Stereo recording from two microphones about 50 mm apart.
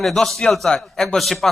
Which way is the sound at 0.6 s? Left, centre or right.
Centre.